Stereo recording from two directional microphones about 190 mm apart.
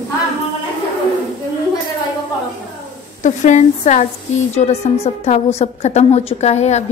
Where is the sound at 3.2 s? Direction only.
40° left (ahead or behind).